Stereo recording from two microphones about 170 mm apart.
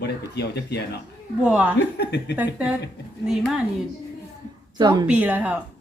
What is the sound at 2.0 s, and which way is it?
Speech, 90° left.